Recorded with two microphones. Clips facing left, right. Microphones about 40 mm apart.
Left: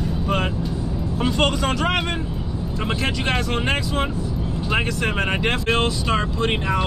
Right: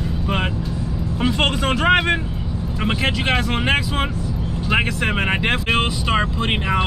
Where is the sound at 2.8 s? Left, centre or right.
Centre.